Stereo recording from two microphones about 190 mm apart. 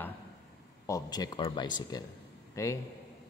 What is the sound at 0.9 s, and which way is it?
A man's voice, 20° left (ahead or behind).